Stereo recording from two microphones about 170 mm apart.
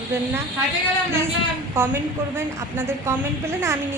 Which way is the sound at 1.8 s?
15° right (ahead or behind).